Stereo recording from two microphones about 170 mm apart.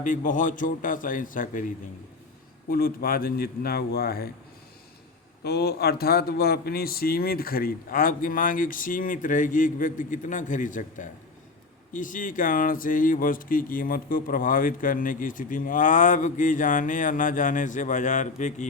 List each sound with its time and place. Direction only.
0.0 s speech: 50° left (ahead or behind); by 4.3 s 65° left (ahead or behind)
5.4 s speech: 70° left (ahead or behind); by 18.7 s 45° left (ahead or behind)